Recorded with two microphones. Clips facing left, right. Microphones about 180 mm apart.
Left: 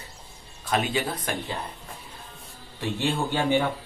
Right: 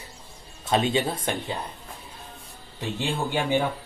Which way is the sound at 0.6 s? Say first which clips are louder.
Right 3 dB; 25° right (ahead or behind).